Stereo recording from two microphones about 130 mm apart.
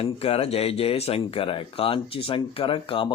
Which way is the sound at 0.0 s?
50° left (ahead or behind).